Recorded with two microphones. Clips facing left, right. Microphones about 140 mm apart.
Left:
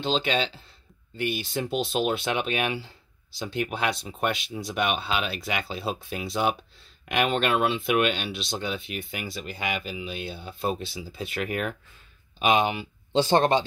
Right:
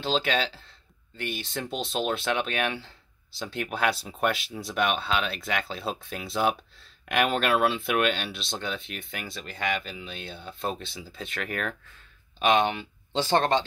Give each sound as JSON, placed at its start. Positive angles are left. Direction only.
{"t": 0.0, "sound": "speech", "side_deg": 0}
{"t": 13.1, "sound": "speech", "side_deg": 15}